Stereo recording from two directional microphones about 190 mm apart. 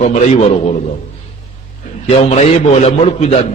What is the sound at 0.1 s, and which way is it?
Speech, 35° left (ahead or behind).